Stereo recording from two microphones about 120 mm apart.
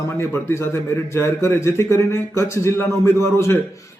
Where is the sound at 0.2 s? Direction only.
20° left (ahead or behind).